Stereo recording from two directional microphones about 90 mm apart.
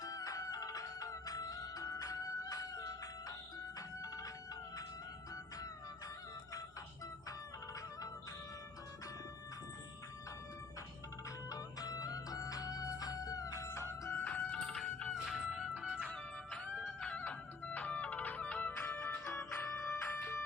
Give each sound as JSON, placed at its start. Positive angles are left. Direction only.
{"t": 0.0, "sound": "music", "side_deg": 40}
{"t": 11.4, "sound": "music", "side_deg": 40}
{"t": 15.3, "sound": "music", "side_deg": -5}
{"t": 16.0, "sound": "music", "side_deg": 10}
{"t": 18.8, "sound": "music", "side_deg": 25}